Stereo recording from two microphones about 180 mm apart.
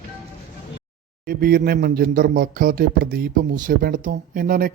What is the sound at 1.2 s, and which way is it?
Speech, 55° right (ahead or behind).